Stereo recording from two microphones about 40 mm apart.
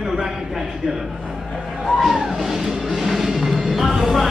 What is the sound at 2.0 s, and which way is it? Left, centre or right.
Music, centre.